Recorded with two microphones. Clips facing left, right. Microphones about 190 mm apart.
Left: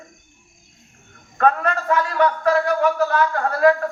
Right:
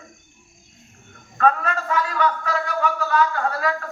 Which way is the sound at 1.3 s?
55° left (ahead or behind).